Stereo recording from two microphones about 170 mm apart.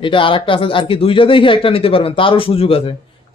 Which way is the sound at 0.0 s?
30° left (ahead or behind).